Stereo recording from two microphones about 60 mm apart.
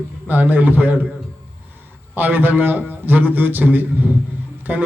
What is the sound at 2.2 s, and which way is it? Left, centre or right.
A man's voice, right.